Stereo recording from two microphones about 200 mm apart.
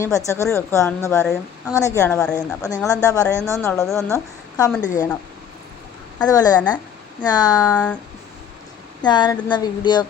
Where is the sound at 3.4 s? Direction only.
15° right (ahead or behind).